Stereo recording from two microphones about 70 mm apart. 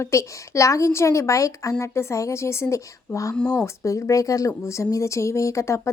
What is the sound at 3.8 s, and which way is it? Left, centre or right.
Speech, left.